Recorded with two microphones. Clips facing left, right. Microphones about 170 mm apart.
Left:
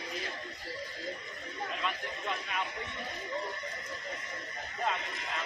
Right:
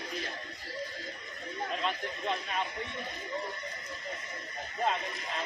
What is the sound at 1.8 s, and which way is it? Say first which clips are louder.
Speech: right 3 dB; 25° right (ahead or behind).